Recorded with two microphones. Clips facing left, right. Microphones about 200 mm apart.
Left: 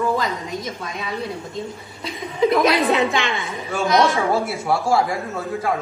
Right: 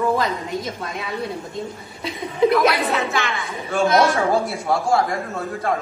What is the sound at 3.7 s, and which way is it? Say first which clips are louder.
A man's voice: right 1 dB; centre (ahead or behind).